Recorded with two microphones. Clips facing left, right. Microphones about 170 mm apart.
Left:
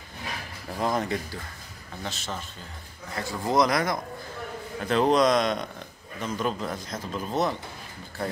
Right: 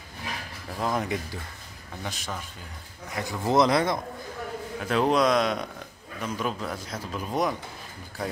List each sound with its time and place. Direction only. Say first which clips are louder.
0.7 s speech: left 1 dB; centre (ahead or behind)
2.0 s a man's voice: left 1 dB; 10° right (ahead or behind)
4.7 s a man's voice: left 2 dB; 5° right (ahead or behind)